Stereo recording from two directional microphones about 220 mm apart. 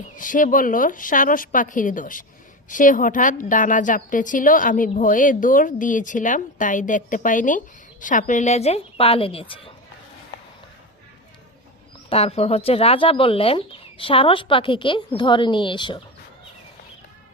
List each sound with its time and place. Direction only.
0.2 s a woman's voice: 35° left (ahead or behind)
12.0 s speech: 25° left (ahead or behind)